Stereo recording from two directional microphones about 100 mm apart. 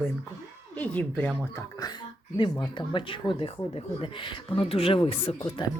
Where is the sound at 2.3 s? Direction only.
55° left (ahead or behind); by 5.3 s 70° left (ahead or behind).